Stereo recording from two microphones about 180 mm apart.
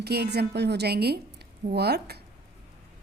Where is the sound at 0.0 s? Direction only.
65° right (ahead or behind).